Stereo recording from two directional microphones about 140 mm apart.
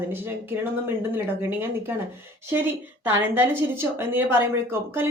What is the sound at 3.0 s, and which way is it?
Speech, 15° right (ahead or behind).